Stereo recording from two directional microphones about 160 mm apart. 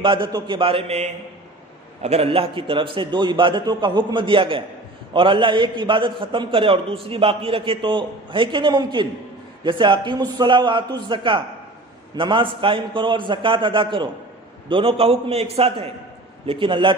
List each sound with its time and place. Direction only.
0.0 s a man's voice: 30° right (ahead or behind)